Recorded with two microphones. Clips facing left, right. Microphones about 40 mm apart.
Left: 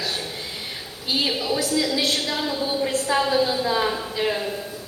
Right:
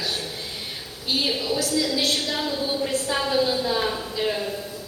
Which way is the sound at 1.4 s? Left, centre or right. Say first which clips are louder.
Left 1 dB; left.